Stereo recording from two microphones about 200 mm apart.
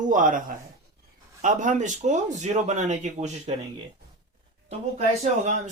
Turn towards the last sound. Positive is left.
turn(degrees=-35)  # may be behind; listen again after turning